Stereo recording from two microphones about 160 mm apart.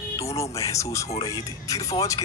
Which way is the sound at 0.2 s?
20° left (ahead or behind).